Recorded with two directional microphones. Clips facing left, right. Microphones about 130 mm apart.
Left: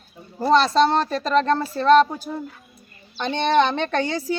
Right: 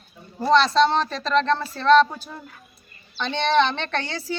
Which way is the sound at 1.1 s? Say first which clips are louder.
Left 2 dB; 45° left (ahead or behind).